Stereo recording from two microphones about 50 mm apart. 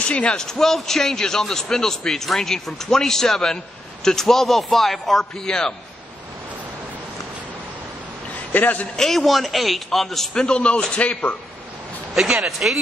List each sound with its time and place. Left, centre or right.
0.0 s a man's voice: left
0.5 s a man's voice: centre
8.5 s a man's voice: left
8.9 s a man's voice: centre
10.4 s a man's voice: left
12.4 s a man's voice: centre